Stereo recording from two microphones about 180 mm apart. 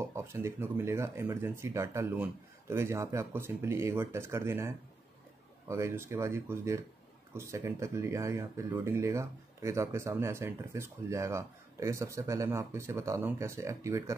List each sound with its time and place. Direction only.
0.0 s speech: 15° right (ahead or behind)